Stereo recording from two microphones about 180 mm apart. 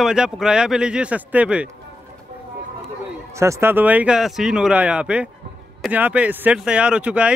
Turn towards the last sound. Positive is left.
turn(degrees=-5)  # may be behind; listen again after turning